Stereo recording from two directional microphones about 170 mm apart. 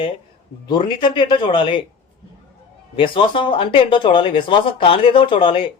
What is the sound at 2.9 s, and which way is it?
Speech, 30° left (ahead or behind).